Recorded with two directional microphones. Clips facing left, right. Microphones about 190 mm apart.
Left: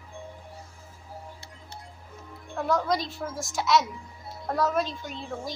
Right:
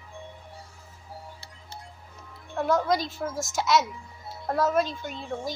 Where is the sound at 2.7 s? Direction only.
Centre (ahead or behind).